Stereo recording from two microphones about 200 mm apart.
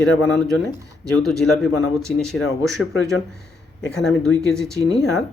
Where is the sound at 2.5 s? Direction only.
15° right (ahead or behind).